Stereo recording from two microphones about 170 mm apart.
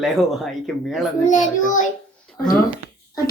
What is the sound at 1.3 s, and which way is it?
Speech, 50° left (ahead or behind).